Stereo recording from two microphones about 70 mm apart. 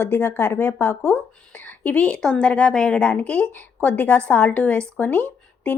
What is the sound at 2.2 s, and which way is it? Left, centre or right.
A woman's voice, centre.